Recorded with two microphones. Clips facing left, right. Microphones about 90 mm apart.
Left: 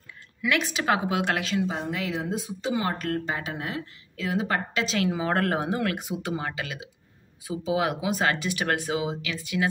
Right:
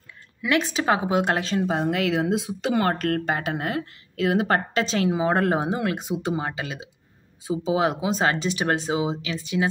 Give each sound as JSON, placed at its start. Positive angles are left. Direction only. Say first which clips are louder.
{"t": 0.4, "sound": "speech", "louder": "right 3 dB", "side_deg": -30}
{"t": 1.7, "sound": "speech", "louder": "right 7 dB", "side_deg": -60}
{"t": 4.7, "sound": "speech", "louder": "right 3 dB", "side_deg": -35}
{"t": 5.1, "sound": "speech", "louder": "right 4 dB", "side_deg": -20}